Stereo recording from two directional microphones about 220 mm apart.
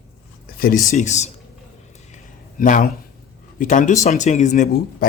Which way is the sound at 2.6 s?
35° left (ahead or behind).